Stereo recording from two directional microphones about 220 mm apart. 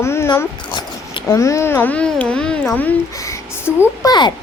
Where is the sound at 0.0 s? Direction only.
10° left (ahead or behind).